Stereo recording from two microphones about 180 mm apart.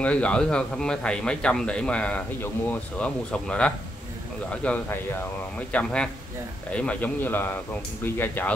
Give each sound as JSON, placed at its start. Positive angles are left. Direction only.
{"t": 0.0, "sound": "a man's voice", "side_deg": 5}